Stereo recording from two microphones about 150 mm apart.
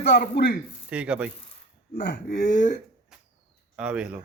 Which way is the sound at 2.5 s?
55° left (ahead or behind).